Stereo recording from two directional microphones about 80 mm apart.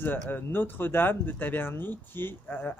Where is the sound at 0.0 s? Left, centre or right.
Left.